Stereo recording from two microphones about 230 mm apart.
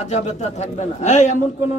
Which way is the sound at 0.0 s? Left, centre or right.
Left.